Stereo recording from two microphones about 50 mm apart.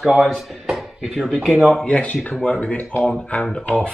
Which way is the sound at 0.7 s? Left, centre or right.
Centre.